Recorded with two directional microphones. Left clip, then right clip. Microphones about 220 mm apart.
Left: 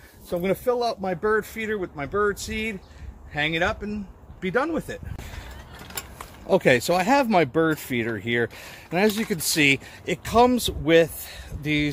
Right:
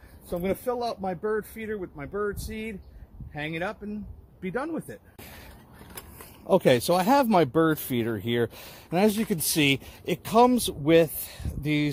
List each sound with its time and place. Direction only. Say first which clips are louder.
0.3 s speech: left 5 dB; 15° left (ahead or behind)
6.4 s speech: left 2 dB; 30° right (ahead or behind)